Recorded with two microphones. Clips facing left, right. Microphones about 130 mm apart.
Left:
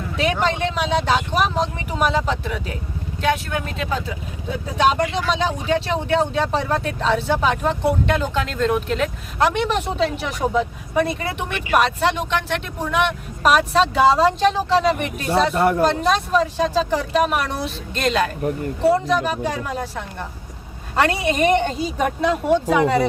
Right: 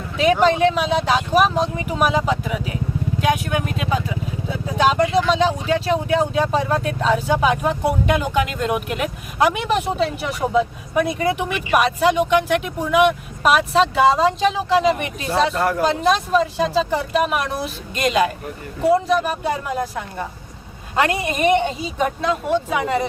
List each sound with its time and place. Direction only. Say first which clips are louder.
0.2 s speech: right 6 dB; 5° right (ahead or behind)
15.5 s speech: left 3 dB; 25° left (ahead or behind)
15.8 s speech: even; centre (ahead or behind)
21.0 s speech: left 1 dB; 5° right (ahead or behind)